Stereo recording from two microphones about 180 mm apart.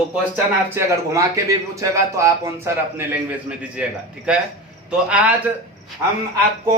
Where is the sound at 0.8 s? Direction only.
15° right (ahead or behind).